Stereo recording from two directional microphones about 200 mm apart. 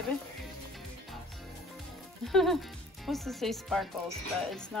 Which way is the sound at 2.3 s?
Centre (ahead or behind).